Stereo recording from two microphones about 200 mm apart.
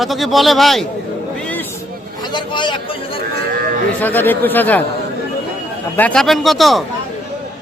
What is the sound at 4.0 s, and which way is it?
Speech, 10° left (ahead or behind).